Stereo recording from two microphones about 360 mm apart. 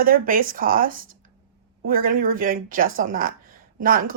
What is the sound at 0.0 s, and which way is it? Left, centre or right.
Speech, right.